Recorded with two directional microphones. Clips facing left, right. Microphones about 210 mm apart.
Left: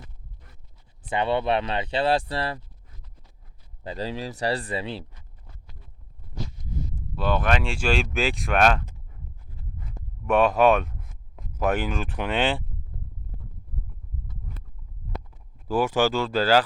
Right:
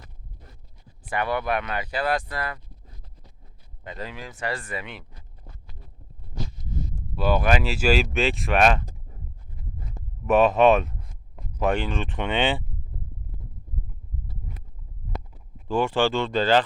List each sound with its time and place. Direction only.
1.1 s speech: 25° left (ahead or behind)
3.8 s speech: 30° left (ahead or behind)
7.2 s speech: 5° right (ahead or behind)
8.9 s a sound: 35° right (ahead or behind)
10.2 s speech: 5° right (ahead or behind)
15.6 s speech: 5° left (ahead or behind)